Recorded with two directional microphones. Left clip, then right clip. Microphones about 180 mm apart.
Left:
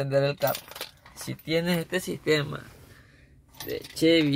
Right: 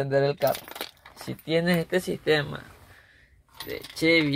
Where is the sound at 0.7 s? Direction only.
45° right (ahead or behind).